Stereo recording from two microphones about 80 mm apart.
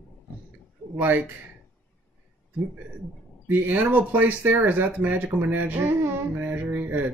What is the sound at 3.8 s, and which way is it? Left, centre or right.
Speech, right.